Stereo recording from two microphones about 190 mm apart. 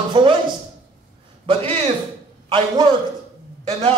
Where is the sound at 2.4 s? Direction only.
25° right (ahead or behind).